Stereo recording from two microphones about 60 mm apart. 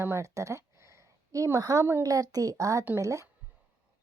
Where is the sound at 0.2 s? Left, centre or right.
Right.